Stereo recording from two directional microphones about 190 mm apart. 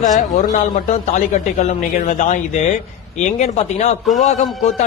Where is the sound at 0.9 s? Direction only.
40° left (ahead or behind).